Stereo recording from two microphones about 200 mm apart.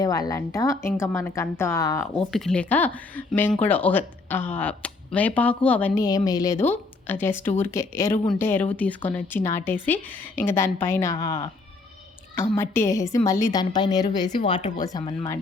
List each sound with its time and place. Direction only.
0.0 s speech: 20° left (ahead or behind)
2.1 s speech: centre (ahead or behind)
6.0 s a woman's voice: 20° left (ahead or behind)
11.1 s a woman's voice: 20° left (ahead or behind)
12.5 s a woman's voice: 15° left (ahead or behind)